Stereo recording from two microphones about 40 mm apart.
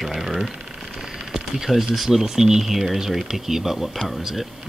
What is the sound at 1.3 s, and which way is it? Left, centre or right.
Speech, centre.